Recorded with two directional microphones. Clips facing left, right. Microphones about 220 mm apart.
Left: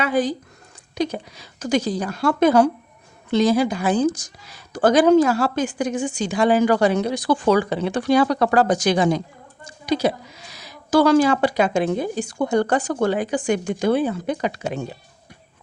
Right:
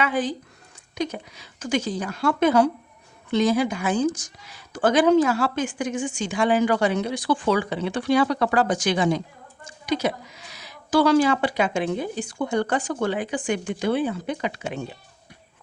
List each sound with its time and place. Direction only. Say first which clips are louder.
0.0 s a woman's voice: left 4 dB; 40° left (ahead or behind)